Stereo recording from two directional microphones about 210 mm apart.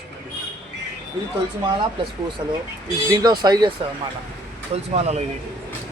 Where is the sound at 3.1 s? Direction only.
20° right (ahead or behind).